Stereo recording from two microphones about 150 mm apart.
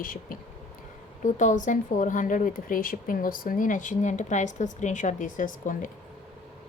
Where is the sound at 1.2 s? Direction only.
55° left (ahead or behind).